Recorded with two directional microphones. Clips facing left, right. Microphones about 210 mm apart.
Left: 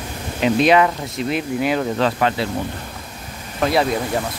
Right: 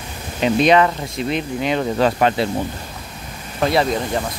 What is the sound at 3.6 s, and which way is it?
Speech, centre (ahead or behind).